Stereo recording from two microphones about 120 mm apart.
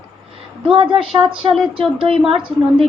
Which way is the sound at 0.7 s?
50° right (ahead or behind).